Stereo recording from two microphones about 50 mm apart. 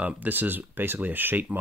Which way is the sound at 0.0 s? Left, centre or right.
Right.